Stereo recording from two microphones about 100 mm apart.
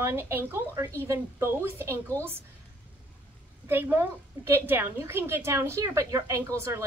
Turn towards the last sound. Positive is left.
turn(degrees=-25)  # may be behind; listen again after turning